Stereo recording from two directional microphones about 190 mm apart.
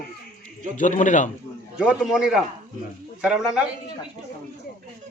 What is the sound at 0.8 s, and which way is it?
Speech, 40° left (ahead or behind).